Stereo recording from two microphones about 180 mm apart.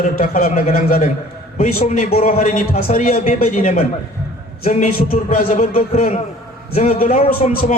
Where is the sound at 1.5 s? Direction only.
40° left (ahead or behind).